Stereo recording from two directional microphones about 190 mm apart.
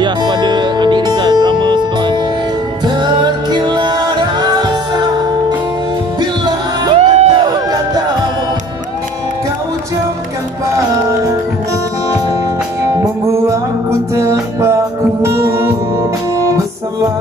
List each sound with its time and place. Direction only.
0.0 s music: 25° right (ahead or behind)
6.4 s music: 20° right (ahead or behind)
7.0 s music: 35° right (ahead or behind)
7.4 s music: 20° right (ahead or behind)
14.1 s music: 15° right (ahead or behind)